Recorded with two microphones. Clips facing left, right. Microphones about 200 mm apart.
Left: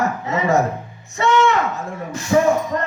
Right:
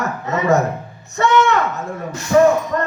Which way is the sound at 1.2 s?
65° right (ahead or behind).